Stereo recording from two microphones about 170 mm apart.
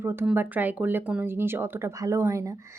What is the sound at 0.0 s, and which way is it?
A woman's voice, 15° right (ahead or behind).